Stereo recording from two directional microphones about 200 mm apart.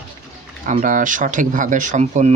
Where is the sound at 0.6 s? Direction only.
40° right (ahead or behind).